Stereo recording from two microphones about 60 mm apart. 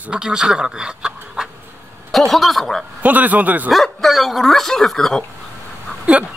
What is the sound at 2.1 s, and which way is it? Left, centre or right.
Speech, centre.